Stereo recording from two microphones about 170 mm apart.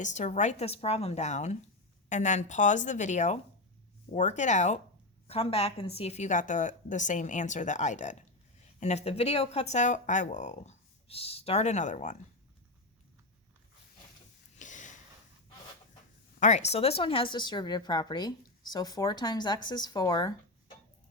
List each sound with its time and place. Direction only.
0.0 s a woman's voice: 45° left (ahead or behind)
14.5 s a sound: 45° left (ahead or behind)
16.4 s speech: 40° left (ahead or behind); by 20.3 s 20° left (ahead or behind)